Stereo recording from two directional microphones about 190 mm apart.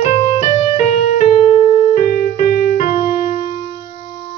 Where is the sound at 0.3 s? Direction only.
25° left (ahead or behind); by 2.9 s 45° left (ahead or behind).